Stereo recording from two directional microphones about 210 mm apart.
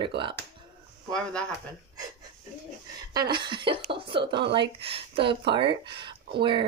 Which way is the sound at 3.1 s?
20° right (ahead or behind).